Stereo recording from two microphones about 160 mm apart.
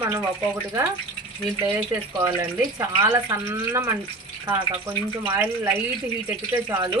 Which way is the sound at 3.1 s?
15° right (ahead or behind).